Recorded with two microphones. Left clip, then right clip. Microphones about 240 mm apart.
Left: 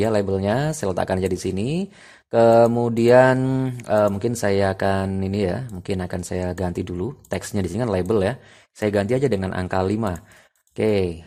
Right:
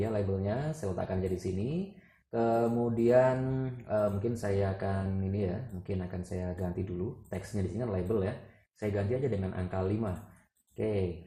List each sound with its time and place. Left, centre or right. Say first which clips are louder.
0.0 s speech: left 12 dB; left
2.3 s speech: left 15 dB; left